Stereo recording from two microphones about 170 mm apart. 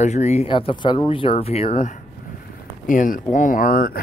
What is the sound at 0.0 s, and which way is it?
Speech, 40° left (ahead or behind).